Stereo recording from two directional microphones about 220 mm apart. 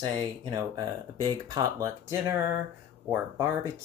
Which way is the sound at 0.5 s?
20° right (ahead or behind).